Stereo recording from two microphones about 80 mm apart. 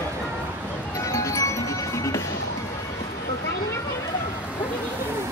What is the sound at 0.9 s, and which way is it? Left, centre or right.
Music, left.